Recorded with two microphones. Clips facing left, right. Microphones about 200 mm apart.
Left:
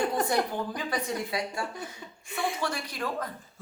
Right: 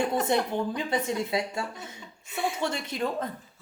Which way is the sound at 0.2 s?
25° right (ahead or behind).